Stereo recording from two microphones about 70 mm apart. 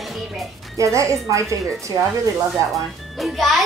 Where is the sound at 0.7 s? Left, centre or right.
Right.